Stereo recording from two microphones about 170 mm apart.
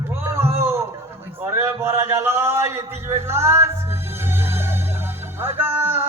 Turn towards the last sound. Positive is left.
turn(degrees=-10)  # may be behind; listen again after turning